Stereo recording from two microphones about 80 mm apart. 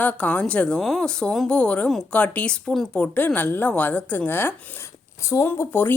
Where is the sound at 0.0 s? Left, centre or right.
Centre.